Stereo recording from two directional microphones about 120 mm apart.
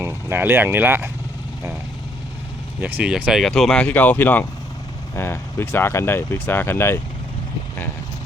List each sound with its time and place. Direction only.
0.0 s speech: 20° right (ahead or behind)
2.8 s speech: 10° right (ahead or behind); by 7.0 s 20° left (ahead or behind)